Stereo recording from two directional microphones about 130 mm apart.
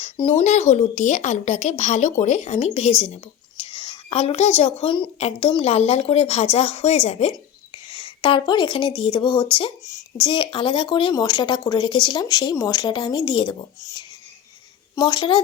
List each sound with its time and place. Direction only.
0.0 s speech: 45° left (ahead or behind)
0.4 s speech: 60° left (ahead or behind)
3.6 s a woman's voice: 40° left (ahead or behind)
7.9 s a woman's voice: 40° left (ahead or behind)
14.9 s speech: 30° left (ahead or behind)